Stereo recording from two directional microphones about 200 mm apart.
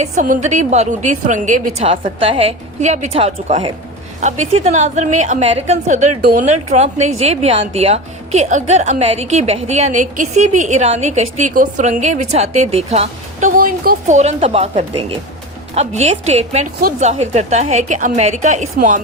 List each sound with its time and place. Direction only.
0.0 s speech: 40° right (ahead or behind)
1.9 s a woman's voice: 25° right (ahead or behind)
13.6 s speech: 45° right (ahead or behind)